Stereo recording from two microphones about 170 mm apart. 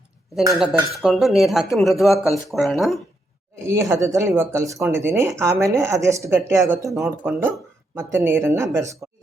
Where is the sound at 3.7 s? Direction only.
15° right (ahead or behind).